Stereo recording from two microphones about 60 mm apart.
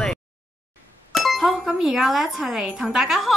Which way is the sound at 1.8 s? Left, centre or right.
Centre.